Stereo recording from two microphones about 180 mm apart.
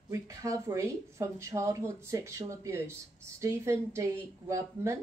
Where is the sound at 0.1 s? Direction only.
20° right (ahead or behind).